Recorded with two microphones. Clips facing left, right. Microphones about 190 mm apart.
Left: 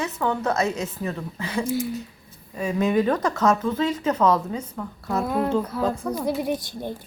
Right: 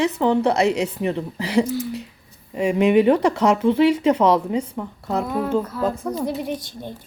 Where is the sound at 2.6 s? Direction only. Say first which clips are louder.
Right 5 dB; 20° right (ahead or behind).